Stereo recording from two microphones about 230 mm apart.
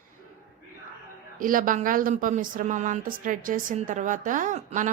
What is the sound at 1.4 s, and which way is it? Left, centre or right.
Speech, right.